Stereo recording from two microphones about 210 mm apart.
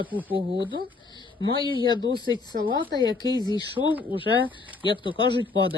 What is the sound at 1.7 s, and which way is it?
Speech, 20° left (ahead or behind).